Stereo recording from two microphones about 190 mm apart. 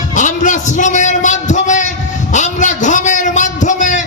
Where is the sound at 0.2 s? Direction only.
40° left (ahead or behind).